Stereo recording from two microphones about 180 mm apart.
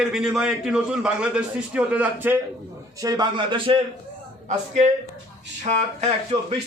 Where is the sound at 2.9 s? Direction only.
20° right (ahead or behind).